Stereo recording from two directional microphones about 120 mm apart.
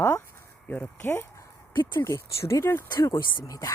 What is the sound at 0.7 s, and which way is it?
Speech, 15° left (ahead or behind).